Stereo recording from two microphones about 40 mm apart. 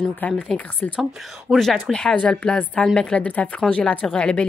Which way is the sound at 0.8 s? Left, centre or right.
Left.